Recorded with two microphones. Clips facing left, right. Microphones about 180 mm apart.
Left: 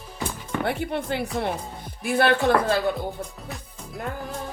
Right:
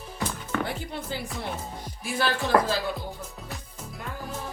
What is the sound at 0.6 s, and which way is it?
Speech, 60° left (ahead or behind).